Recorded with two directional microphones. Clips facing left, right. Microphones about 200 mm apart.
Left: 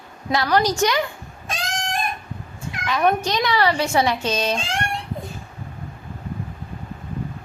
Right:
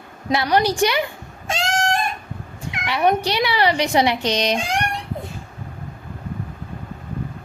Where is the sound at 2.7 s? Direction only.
20° right (ahead or behind).